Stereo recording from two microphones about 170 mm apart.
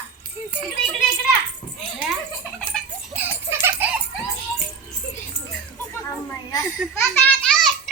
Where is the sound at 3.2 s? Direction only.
10° right (ahead or behind).